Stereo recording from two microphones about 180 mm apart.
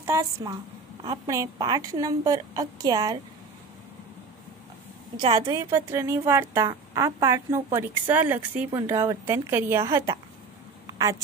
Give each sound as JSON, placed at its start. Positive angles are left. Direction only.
{"t": 0.0, "sound": "a woman's voice", "side_deg": -15}
{"t": 5.1, "sound": "a woman's voice", "side_deg": -25}
{"t": 5.7, "sound": "a woman's voice", "side_deg": -15}